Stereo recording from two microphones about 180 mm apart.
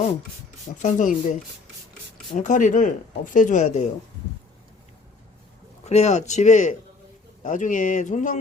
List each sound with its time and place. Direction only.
0.8 s speech: 45° left (ahead or behind)
5.8 s a man's voice: 40° left (ahead or behind)